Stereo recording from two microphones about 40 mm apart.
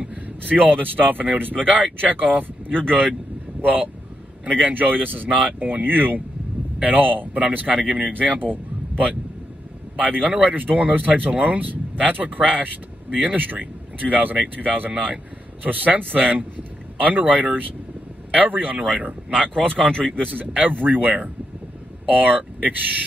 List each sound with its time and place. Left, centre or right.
0.1 s speech: right
7.3 s speech: right
19.5 s speech: centre
20.2 s speech: right